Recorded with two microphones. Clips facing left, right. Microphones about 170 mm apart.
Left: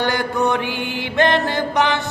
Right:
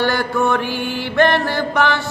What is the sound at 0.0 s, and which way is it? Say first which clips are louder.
Chant: right 1 dB; 20° left (ahead or behind).